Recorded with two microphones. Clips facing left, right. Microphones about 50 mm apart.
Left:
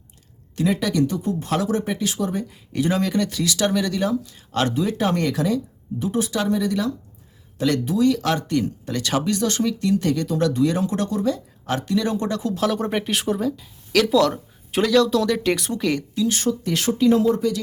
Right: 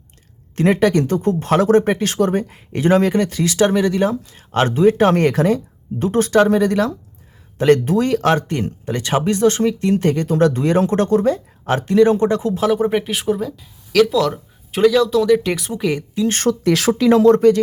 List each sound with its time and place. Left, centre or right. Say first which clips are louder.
0.5 s speech: right 7 dB; right; by 16.0 s centre
16.1 s speech: right 3 dB; right
16.5 s speech: right 6 dB; right